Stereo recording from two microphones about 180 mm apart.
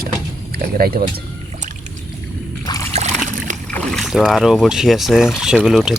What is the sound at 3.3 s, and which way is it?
Boat, 45° right (ahead or behind).